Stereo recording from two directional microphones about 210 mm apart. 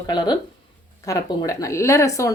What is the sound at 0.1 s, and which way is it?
Speech, 20° left (ahead or behind).